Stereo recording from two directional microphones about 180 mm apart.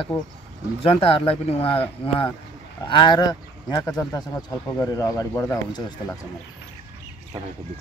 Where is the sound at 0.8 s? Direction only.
35° left (ahead or behind).